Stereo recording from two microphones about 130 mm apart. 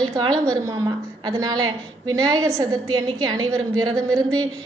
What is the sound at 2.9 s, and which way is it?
A woman's voice, 35° right (ahead or behind).